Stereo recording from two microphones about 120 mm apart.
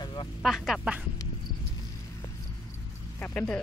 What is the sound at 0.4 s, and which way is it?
Speech, centre (ahead or behind).